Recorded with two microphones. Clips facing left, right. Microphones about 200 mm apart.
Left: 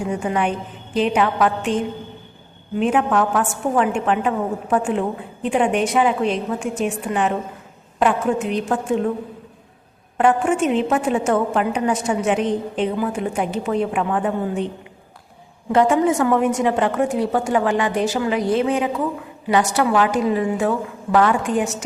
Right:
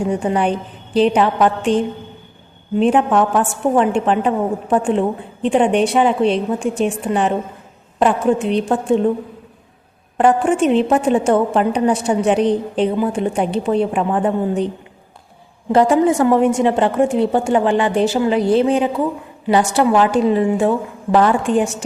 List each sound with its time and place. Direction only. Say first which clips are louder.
0.1 s a woman's voice: right 2 dB; 35° right (ahead or behind)
10.2 s a woman's voice: right 3 dB; 35° right (ahead or behind)
15.7 s a woman's voice: right 3 dB; 35° right (ahead or behind)